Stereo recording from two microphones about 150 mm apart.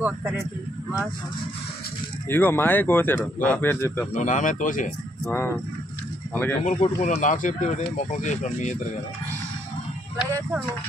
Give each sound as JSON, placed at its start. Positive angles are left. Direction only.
{"t": 0.0, "sound": "speech", "side_deg": -10}
{"t": 2.2, "sound": "speech", "side_deg": 15}
{"t": 4.1, "sound": "speech", "side_deg": 55}
{"t": 5.2, "sound": "speech", "side_deg": 15}
{"t": 6.6, "sound": "speech", "side_deg": 55}